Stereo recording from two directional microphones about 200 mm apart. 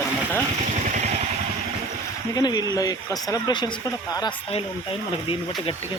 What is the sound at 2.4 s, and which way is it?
Speech, 20° left (ahead or behind).